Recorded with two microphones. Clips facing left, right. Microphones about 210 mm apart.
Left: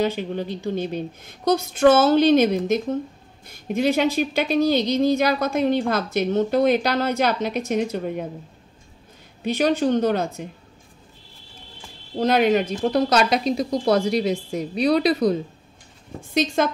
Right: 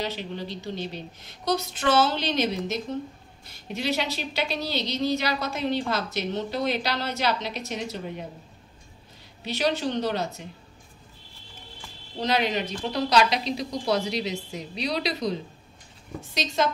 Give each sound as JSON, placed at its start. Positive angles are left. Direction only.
{"t": 0.0, "sound": "a woman's voice", "side_deg": 50}
{"t": 9.4, "sound": "a woman's voice", "side_deg": 50}
{"t": 12.2, "sound": "a woman's voice", "side_deg": 50}